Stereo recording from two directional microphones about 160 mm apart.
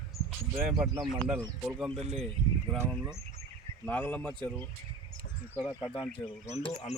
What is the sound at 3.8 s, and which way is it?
Speech, 10° left (ahead or behind).